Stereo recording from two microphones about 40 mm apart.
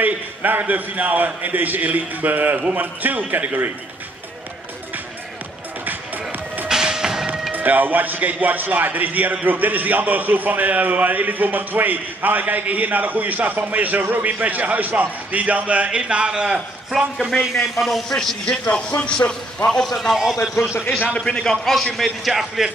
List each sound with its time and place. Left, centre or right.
0.0 s a man's voice: right
5.9 s music: right
6.7 s music: centre
7.5 s a man's voice: right
16.9 s a man's voice: centre
18.4 s speech: left
19.7 s a man's voice: centre
21.3 s a man's voice: centre
21.9 s a man's voice: centre